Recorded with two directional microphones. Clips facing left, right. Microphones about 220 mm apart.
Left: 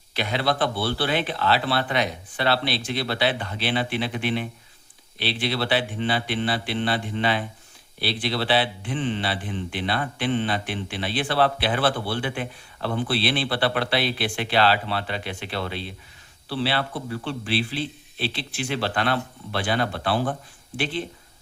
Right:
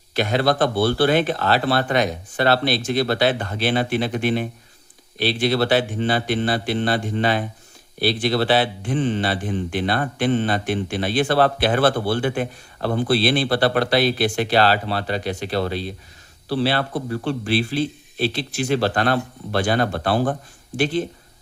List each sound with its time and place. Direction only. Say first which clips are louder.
0.1 s speech: right 6 dB; 45° right (ahead or behind)